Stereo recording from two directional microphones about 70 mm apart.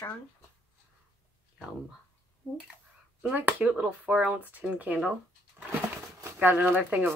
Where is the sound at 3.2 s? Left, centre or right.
Right.